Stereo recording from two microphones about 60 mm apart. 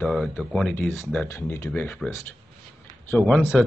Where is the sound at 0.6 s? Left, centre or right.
Centre.